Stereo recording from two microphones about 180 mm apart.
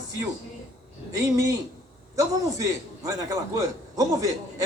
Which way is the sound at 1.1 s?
20° right (ahead or behind).